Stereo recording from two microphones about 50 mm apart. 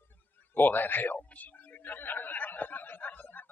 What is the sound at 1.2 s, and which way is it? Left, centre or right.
Snicker, left.